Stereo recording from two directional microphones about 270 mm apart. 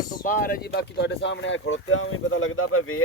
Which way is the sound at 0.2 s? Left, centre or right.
Left.